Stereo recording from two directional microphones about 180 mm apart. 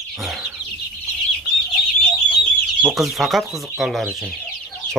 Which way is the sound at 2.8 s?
Centre (ahead or behind).